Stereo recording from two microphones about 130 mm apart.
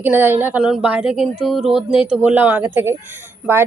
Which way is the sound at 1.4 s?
Centre (ahead or behind).